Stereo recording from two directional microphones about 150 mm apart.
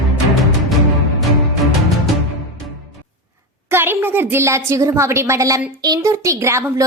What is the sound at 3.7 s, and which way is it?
A woman's voice, 15° right (ahead or behind).